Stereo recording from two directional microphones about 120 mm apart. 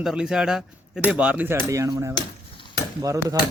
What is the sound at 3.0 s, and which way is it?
Speech, 30° right (ahead or behind).